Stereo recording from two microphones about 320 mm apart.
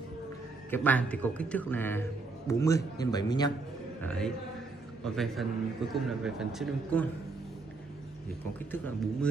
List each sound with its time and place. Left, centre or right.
0.7 s a man's voice: centre
8.7 s a man's voice: centre